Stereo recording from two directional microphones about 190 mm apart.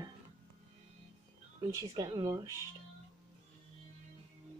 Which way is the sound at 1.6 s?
20° right (ahead or behind).